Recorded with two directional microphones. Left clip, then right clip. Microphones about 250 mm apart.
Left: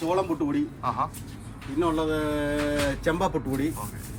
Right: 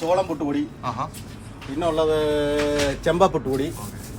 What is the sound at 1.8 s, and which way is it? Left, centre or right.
Speech, right.